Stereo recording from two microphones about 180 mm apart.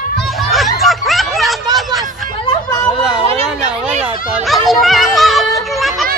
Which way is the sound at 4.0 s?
Centre (ahead or behind).